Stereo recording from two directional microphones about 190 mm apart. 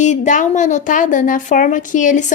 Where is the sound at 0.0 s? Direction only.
40° left (ahead or behind).